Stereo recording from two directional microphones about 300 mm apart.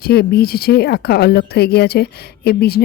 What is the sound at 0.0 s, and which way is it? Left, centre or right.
Speech, left.